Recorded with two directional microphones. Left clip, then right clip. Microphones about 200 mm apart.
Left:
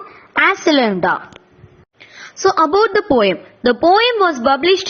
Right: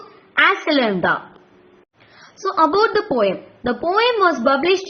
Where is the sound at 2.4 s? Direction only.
35° left (ahead or behind).